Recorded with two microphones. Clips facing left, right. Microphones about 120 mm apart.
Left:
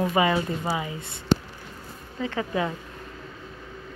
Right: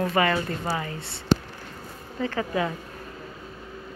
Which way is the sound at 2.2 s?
20° left (ahead or behind).